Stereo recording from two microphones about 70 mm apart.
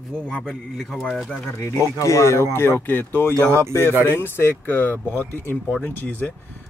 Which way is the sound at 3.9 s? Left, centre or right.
Right.